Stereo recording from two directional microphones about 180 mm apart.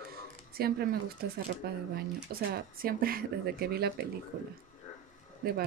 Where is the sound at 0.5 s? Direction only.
60° right (ahead or behind).